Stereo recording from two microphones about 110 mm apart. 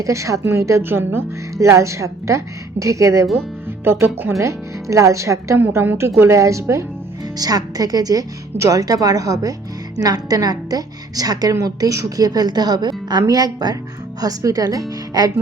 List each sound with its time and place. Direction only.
0.0 s a woman's voice: 30° right (ahead or behind)